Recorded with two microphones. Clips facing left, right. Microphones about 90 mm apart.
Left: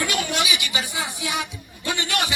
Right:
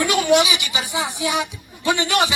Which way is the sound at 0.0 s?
20° right (ahead or behind).